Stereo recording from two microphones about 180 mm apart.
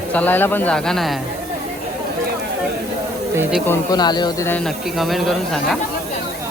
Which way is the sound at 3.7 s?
20° left (ahead or behind).